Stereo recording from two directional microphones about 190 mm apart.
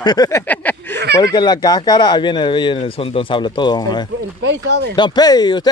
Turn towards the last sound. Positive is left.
turn(degrees=20)  # may be behind; listen again after turning